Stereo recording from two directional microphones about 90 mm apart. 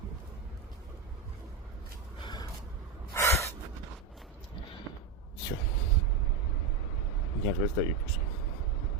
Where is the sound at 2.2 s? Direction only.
55° left (ahead or behind).